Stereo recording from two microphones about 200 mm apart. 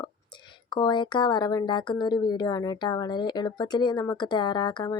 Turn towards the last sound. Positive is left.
turn(degrees=20)  # may be behind; listen again after turning